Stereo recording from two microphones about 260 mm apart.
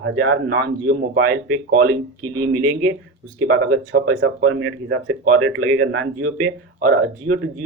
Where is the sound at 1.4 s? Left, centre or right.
Right.